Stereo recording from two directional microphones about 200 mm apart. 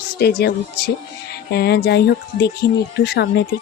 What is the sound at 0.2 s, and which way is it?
Speech, 55° left (ahead or behind).